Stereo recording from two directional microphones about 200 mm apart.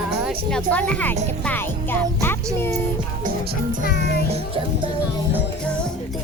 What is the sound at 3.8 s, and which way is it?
Music, 50° left (ahead or behind).